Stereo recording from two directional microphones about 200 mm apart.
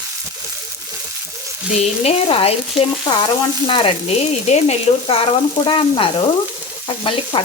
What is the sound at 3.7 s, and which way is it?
Frying, 25° left (ahead or behind).